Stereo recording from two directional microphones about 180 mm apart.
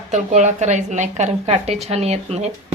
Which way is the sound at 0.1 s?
40° right (ahead or behind).